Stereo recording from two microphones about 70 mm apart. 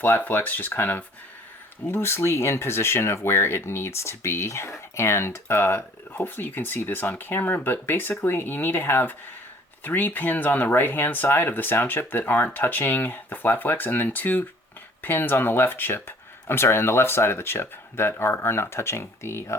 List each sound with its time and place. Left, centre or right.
0.0 s speech: left